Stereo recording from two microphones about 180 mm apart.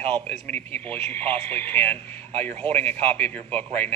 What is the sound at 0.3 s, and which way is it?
Speech, 10° left (ahead or behind).